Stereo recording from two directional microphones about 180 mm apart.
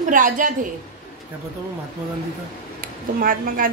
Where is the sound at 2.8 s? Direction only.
50° right (ahead or behind).